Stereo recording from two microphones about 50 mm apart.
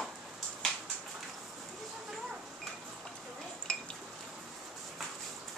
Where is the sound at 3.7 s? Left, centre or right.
Centre.